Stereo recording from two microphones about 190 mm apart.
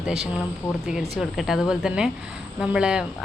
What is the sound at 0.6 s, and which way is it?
Speech, 10° left (ahead or behind).